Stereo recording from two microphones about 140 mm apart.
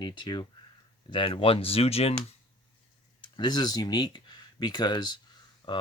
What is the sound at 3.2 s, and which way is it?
Speech, 30° left (ahead or behind).